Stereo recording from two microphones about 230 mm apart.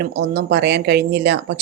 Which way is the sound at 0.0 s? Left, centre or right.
Right.